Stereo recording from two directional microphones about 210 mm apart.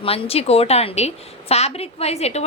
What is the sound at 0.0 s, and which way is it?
A woman's voice, 30° left (ahead or behind).